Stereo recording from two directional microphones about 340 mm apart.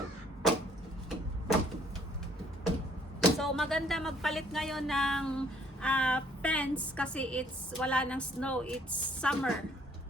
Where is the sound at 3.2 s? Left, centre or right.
Centre.